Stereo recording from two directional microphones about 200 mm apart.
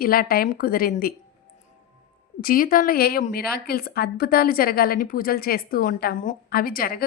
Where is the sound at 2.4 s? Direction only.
45° left (ahead or behind).